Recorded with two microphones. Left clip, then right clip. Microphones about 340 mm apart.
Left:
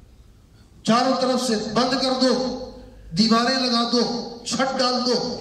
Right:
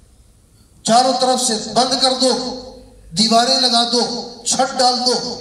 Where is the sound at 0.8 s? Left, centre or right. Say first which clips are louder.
Right 6 dB; centre.